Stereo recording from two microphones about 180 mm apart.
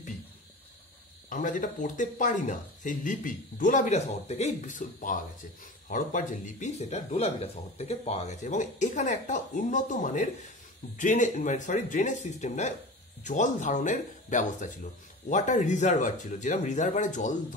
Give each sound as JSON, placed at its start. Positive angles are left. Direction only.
{"t": 1.3, "sound": "speech", "side_deg": 45}